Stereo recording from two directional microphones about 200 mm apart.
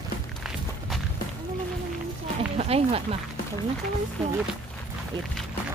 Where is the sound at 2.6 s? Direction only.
30° right (ahead or behind).